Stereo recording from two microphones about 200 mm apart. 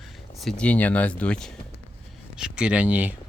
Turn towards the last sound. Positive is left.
turn(degrees=-5)  # may be behind; listen again after turning